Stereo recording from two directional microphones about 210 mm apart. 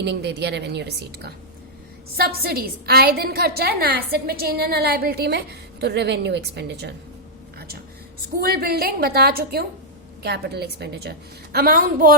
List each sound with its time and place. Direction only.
0.0 s a woman's voice: 55° right (ahead or behind)
8.4 s a woman's voice: 45° right (ahead or behind)